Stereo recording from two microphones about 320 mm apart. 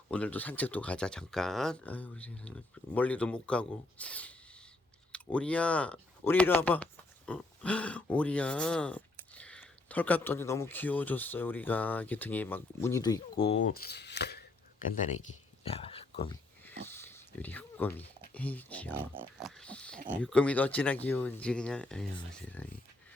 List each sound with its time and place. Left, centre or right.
0.1 s speech: centre; by 14.4 s left
15.6 s speech: centre
16.9 s a sound: centre
18.3 s speech: centre
19.1 s pig: centre
20.2 s speech: centre